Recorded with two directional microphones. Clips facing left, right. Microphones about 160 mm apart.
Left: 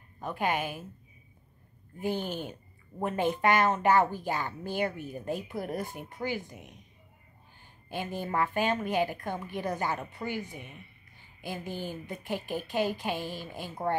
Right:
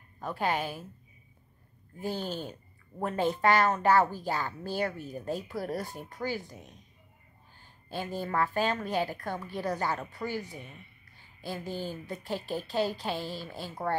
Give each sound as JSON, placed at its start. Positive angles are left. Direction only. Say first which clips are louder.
{"t": 0.2, "sound": "a woman's voice", "louder": "even", "side_deg": 15}
{"t": 2.0, "sound": "a woman's voice", "louder": "left 2 dB", "side_deg": 15}
{"t": 7.9, "sound": "a woman's voice", "louder": "even", "side_deg": 15}
{"t": 11.4, "sound": "a woman's voice", "louder": "right 1 dB", "side_deg": 15}